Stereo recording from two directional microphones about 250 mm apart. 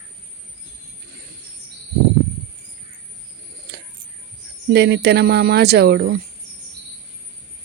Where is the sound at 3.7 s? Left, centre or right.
Right.